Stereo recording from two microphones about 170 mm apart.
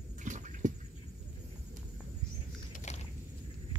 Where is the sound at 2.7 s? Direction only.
45° left (ahead or behind).